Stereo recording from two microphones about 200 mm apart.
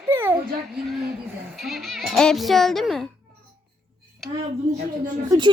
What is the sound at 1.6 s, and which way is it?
Speech, centre (ahead or behind).